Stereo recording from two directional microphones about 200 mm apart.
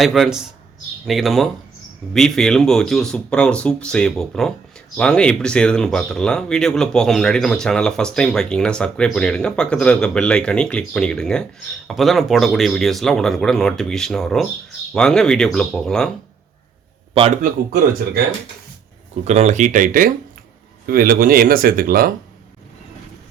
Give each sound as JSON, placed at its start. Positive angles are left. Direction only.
{"t": 0.0, "sound": "speech", "side_deg": 0}
{"t": 17.4, "sound": "speech", "side_deg": -45}
{"t": 19.2, "sound": "speech", "side_deg": -35}